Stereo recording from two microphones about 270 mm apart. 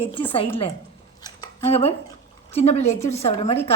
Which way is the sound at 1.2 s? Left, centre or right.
Centre.